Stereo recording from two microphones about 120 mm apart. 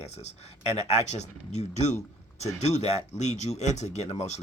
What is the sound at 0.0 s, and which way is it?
Speech, 65° left (ahead or behind).